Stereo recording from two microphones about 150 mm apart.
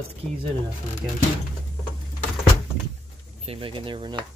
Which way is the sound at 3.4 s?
35° right (ahead or behind).